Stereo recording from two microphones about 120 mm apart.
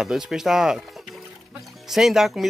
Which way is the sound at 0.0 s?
5° right (ahead or behind).